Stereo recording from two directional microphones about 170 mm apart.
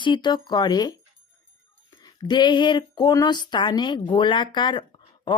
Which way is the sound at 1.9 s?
25° left (ahead or behind).